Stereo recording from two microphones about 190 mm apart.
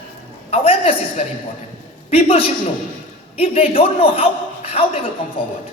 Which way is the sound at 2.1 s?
30° left (ahead or behind).